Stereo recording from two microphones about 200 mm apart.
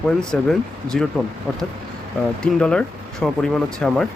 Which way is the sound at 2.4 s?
5° left (ahead or behind).